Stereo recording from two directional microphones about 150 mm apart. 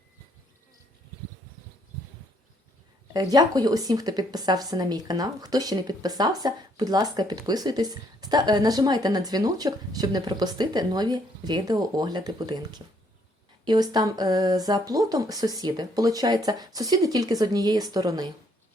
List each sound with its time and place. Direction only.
3.1 s a woman's voice: 25° right (ahead or behind)